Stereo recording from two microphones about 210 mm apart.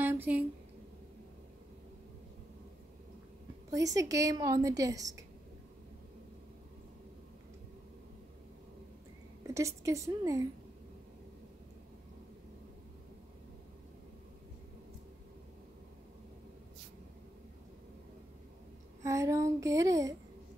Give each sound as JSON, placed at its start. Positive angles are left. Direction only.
{"t": 0.0, "sound": "a sound", "side_deg": -10}
{"t": 3.7, "sound": "a woman's voice", "side_deg": -15}
{"t": 9.5, "sound": "a woman's voice", "side_deg": -15}
{"t": 19.0, "sound": "a woman's voice", "side_deg": -15}